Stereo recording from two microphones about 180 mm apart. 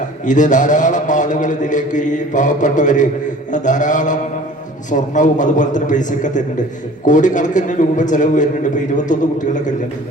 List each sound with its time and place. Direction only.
0.3 s a man's voice: 45° left (ahead or behind)